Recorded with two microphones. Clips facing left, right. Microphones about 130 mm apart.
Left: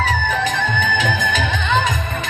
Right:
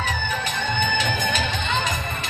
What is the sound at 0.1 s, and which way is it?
Music, 90° left.